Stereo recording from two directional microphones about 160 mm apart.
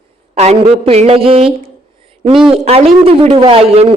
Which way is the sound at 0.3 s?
40° right (ahead or behind).